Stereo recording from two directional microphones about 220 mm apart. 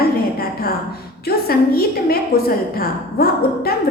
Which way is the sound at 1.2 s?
45° left (ahead or behind).